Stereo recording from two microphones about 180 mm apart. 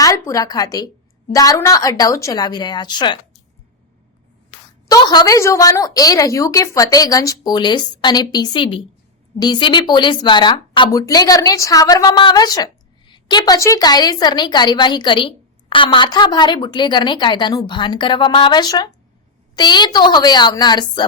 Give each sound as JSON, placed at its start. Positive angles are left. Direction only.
{"t": 0.0, "sound": "a woman's voice", "side_deg": 20}
{"t": 4.9, "sound": "a woman's voice", "side_deg": 20}